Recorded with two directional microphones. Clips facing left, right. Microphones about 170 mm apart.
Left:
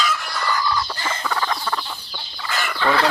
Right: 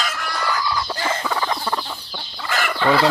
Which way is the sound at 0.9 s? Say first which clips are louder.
Right 2 dB; 10° right (ahead or behind).